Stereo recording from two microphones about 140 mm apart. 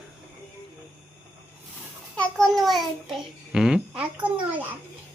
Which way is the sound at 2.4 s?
Centre (ahead or behind).